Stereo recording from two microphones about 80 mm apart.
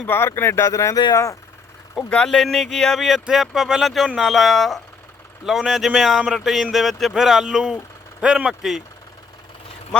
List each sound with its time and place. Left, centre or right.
0.1 s speech: left
0.9 s speech: left
2.0 s speech: centre